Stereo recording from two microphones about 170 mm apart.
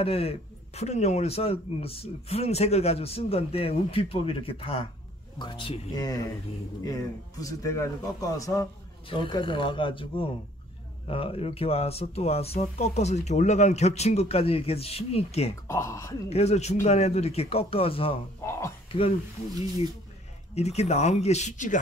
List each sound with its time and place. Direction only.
0.0 s a man's voice: 35° left (ahead or behind)
15.7 s speech: 15° left (ahead or behind)
16.3 s a man's voice: 40° left (ahead or behind)
18.4 s speech: 15° left (ahead or behind)
18.9 s speech: 30° left (ahead or behind)
20.5 s a man's voice: 40° left (ahead or behind)